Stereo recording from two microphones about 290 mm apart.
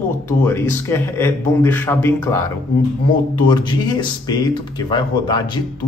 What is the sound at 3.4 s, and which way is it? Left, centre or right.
A man's voice, centre.